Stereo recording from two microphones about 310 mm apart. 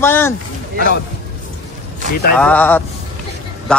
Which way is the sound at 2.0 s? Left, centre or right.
Right.